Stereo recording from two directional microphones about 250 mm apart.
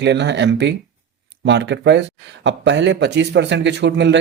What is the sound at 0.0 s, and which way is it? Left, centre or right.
A man's voice, right.